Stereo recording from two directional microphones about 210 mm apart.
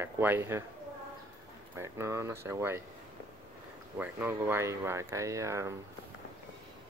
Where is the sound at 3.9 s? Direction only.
10° right (ahead or behind).